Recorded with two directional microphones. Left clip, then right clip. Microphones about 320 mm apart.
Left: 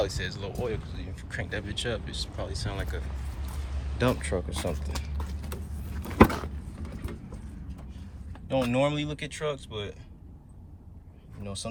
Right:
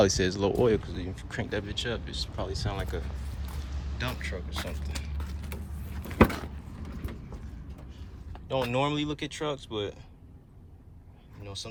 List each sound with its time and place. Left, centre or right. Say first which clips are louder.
0.0 s speech: right 7 dB; centre
3.2 s a sound: left 1 dB; left
3.9 s speech: left 8 dB; centre
6.0 s a sound: left 3 dB; centre
8.3 s speech: left 2 dB; centre
11.4 s speech: left 3 dB; centre